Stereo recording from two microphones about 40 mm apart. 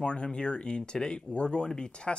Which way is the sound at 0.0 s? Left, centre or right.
Left.